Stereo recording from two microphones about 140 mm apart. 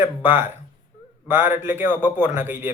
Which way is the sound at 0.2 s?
15° right (ahead or behind).